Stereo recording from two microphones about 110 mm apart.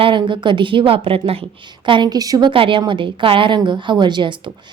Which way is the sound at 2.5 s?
50° right (ahead or behind).